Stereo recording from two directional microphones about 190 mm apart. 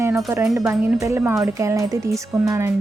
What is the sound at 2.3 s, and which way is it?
Speech, centre (ahead or behind).